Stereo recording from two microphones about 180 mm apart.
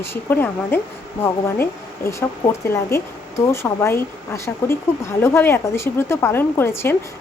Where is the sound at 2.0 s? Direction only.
15° left (ahead or behind).